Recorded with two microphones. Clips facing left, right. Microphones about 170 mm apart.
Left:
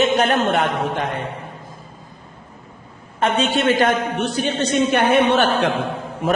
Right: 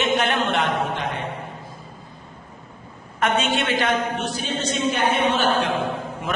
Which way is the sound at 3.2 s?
35° left (ahead or behind).